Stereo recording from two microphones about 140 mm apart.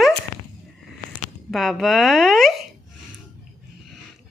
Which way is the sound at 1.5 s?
Centre (ahead or behind).